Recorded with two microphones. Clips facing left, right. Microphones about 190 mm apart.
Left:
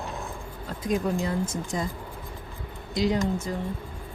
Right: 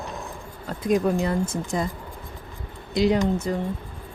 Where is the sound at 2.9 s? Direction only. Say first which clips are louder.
Right 4 dB; 65° right (ahead or behind).